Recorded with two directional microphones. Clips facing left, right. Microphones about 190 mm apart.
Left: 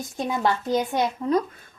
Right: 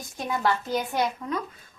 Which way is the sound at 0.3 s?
20° left (ahead or behind).